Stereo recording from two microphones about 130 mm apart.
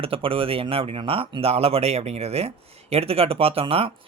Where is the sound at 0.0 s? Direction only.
45° right (ahead or behind).